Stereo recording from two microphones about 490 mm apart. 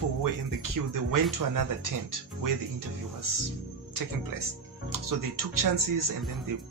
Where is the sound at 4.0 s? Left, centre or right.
Right.